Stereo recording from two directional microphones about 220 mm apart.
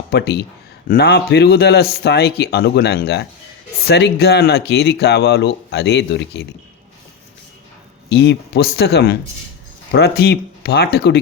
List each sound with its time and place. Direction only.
0.1 s speech: 50° left (ahead or behind)
8.1 s speech: 50° left (ahead or behind)